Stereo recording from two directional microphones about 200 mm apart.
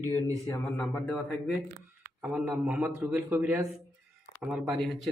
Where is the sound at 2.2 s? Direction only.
5° right (ahead or behind).